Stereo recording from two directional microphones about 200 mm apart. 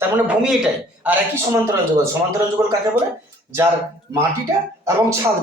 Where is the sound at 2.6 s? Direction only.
15° right (ahead or behind).